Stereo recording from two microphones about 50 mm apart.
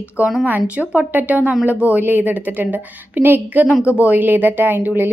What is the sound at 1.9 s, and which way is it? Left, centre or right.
A woman's voice, right.